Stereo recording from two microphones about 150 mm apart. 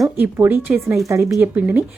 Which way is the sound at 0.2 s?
15° right (ahead or behind).